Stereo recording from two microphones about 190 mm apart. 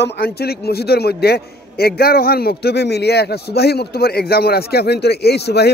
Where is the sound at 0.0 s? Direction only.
55° left (ahead or behind).